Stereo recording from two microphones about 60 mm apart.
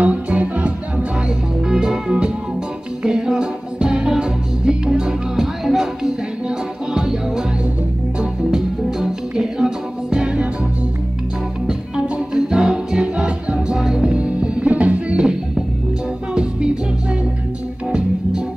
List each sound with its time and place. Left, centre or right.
0.0 s music: right
1.7 s music: centre
12.4 s music: centre